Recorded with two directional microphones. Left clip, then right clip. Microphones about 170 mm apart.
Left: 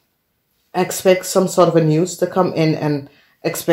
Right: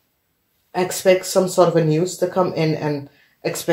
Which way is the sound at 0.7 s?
45° left (ahead or behind).